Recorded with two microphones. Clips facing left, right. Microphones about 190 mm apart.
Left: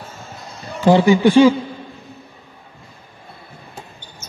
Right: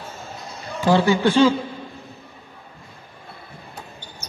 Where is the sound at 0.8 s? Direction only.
15° left (ahead or behind).